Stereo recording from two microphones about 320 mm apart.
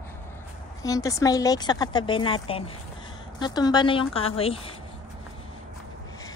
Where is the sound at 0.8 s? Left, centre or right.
Centre.